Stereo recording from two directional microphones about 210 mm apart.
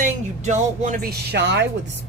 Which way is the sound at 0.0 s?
35° right (ahead or behind).